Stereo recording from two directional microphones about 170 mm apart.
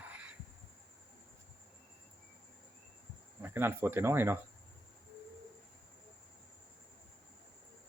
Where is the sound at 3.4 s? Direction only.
10° right (ahead or behind).